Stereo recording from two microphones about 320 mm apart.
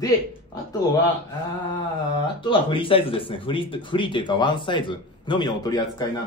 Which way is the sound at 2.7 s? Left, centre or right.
Centre.